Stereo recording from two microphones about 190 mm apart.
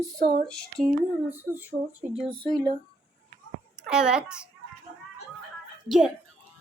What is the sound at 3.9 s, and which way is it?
Speech, 5° right (ahead or behind).